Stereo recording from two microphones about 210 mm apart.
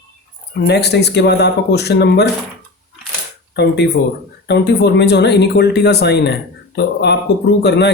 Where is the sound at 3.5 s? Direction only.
55° left (ahead or behind).